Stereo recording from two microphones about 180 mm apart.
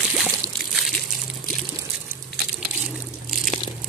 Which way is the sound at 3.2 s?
Centre (ahead or behind).